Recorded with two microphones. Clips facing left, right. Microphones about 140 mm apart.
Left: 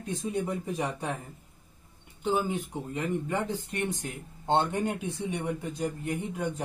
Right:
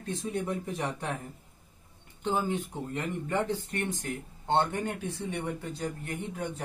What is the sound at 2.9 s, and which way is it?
Speech, 15° left (ahead or behind).